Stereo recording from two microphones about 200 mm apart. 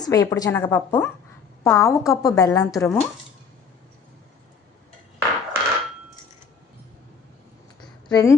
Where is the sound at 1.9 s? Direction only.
15° left (ahead or behind).